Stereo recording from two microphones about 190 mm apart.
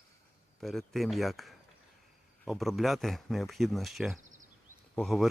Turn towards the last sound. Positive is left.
turn(degrees=0)  # may be behind; listen again after turning